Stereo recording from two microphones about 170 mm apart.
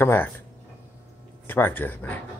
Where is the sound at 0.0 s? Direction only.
15° left (ahead or behind).